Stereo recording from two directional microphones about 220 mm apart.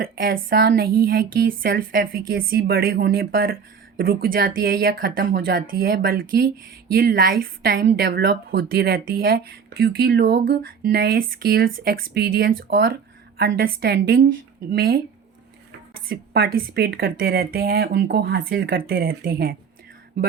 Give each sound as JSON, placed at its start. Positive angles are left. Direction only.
{"t": 0.0, "sound": "a woman's voice", "side_deg": -40}
{"t": 16.0, "sound": "a woman's voice", "side_deg": -45}